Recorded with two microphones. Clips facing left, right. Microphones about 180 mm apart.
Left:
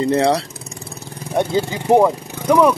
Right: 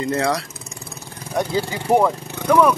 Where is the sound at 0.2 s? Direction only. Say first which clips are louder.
Left 5 dB; 30° left (ahead or behind).